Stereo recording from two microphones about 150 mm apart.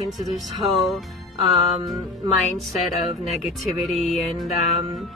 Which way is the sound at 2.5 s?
Centre (ahead or behind).